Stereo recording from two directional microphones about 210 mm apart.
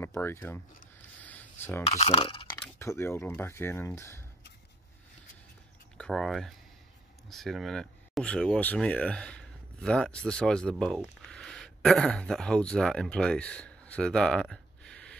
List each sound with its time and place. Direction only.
0.0 s speech: 10° left (ahead or behind)
1.2 s a sound: 10° left (ahead or behind)
1.9 s speech: 30° left (ahead or behind)
2.6 s speech: 10° left (ahead or behind)
5.9 s speech: 5° left (ahead or behind)